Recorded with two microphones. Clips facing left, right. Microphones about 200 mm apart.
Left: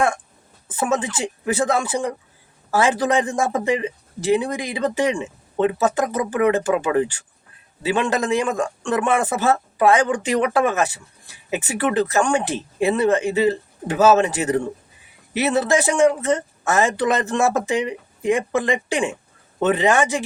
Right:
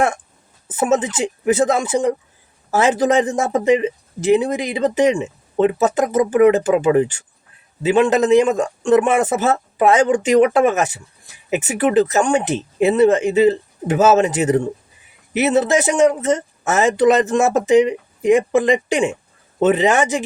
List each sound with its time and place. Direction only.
0.8 s speech: 20° right (ahead or behind)